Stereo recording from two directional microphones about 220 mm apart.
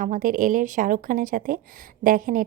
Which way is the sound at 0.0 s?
35° right (ahead or behind).